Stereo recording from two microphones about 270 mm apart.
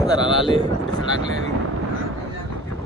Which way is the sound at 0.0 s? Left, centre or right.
Centre.